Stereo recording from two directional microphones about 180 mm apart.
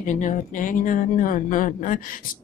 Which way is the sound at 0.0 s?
45° left (ahead or behind).